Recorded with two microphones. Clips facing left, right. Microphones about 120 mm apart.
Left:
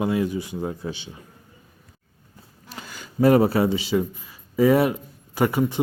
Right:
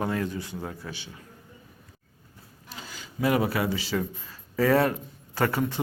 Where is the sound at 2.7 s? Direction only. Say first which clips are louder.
Left 6 dB; 50° left (ahead or behind); by 3.7 s 30° left (ahead or behind).